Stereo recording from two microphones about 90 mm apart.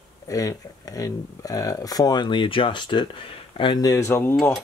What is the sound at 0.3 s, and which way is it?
Speech, 40° left (ahead or behind).